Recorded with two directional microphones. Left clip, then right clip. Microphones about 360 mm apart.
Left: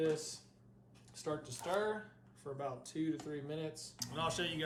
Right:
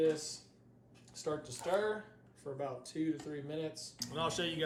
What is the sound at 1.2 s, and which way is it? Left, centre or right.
Speech, centre.